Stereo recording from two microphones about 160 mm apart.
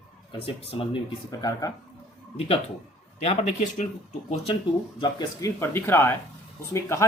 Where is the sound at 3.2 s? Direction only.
40° left (ahead or behind).